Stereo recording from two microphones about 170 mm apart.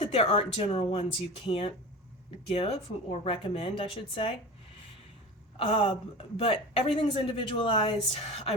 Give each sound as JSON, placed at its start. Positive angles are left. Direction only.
{"t": 0.0, "sound": "a woman's voice", "side_deg": 35}
{"t": 5.5, "sound": "a woman's voice", "side_deg": 35}